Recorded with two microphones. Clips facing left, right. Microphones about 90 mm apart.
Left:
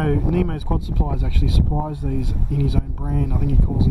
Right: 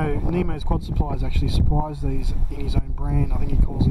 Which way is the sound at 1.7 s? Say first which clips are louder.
Right 3 dB; 15° left (ahead or behind).